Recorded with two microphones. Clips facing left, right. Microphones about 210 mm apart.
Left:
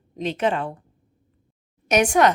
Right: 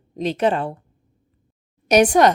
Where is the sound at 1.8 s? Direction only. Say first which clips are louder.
Right 4 dB; 35° right (ahead or behind).